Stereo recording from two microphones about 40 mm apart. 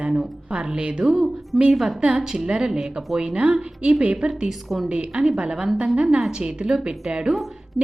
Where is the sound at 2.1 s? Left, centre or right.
Centre.